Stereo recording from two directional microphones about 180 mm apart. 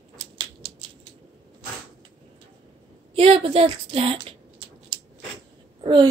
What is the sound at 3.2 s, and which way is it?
Speech, 30° right (ahead or behind).